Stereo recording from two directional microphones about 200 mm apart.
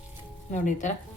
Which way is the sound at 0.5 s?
40° left (ahead or behind).